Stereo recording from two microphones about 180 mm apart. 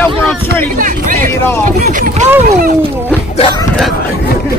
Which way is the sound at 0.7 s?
45° right (ahead or behind).